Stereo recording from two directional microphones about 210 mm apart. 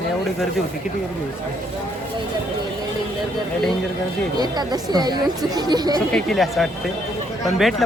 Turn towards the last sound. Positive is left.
turn(degrees=0)  # may be behind; listen again after turning